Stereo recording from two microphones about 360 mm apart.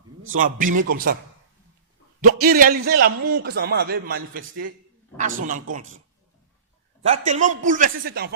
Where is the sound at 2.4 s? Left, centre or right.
Right.